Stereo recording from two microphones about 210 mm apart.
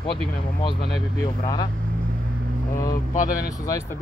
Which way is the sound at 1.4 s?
20° left (ahead or behind).